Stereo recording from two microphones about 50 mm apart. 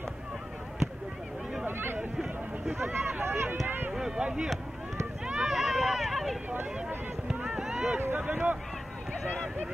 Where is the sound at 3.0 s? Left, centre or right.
Right.